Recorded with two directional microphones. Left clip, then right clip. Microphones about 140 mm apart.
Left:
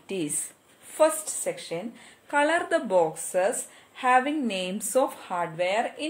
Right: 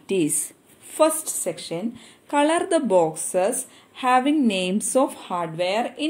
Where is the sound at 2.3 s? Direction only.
35° right (ahead or behind).